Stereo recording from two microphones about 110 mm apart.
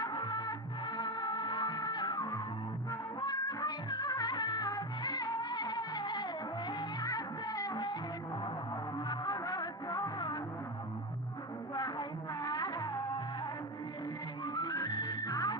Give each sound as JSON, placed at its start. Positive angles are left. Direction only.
{"t": 0.0, "sound": "music", "side_deg": 45}
{"t": 2.9, "sound": "music of bollywood", "side_deg": 40}
{"t": 6.8, "sound": "music", "side_deg": 40}
{"t": 8.9, "sound": "music", "side_deg": 40}
{"t": 11.7, "sound": "music", "side_deg": 45}
{"t": 14.4, "sound": "music", "side_deg": 40}